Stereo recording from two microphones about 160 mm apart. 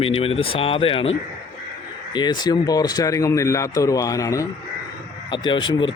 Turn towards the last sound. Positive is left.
turn(degrees=30)  # may be behind; listen again after turning